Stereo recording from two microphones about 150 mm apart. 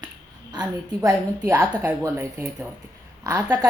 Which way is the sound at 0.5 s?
25° right (ahead or behind).